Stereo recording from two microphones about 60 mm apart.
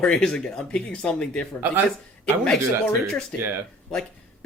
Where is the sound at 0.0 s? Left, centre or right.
Centre.